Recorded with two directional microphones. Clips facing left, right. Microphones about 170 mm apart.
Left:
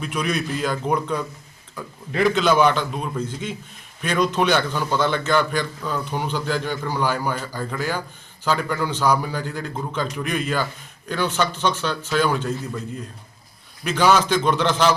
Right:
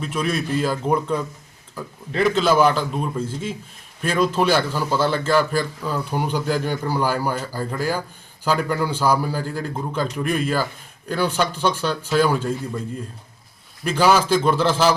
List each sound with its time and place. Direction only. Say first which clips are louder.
0.3 s a man's voice: right 2 dB; 5° right (ahead or behind)
13.8 s a man's voice: right 1 dB; 10° right (ahead or behind)